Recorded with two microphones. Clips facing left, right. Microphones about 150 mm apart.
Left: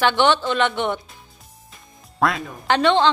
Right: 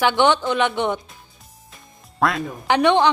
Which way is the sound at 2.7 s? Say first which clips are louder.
Right 1 dB; 15° right (ahead or behind).